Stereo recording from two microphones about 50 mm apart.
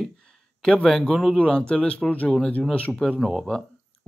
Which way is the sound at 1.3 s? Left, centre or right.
Left.